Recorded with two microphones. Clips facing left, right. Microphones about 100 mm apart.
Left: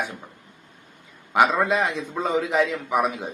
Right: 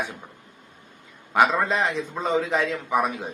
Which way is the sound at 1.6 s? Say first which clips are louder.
Left 1 dB; 15° left (ahead or behind).